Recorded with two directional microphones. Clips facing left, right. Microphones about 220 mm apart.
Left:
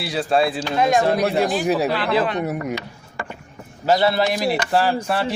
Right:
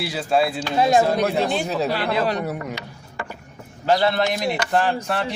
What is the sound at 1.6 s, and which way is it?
Speech, 15° left (ahead or behind).